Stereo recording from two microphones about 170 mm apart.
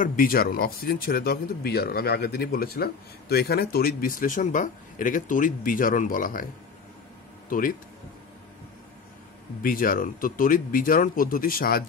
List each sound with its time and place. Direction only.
0.0 s speech: 55° left (ahead or behind)
7.4 s speech: 55° left (ahead or behind)
9.6 s speech: 55° left (ahead or behind)